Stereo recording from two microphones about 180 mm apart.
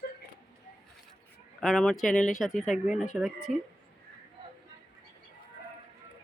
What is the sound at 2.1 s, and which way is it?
Speech, 45° left (ahead or behind).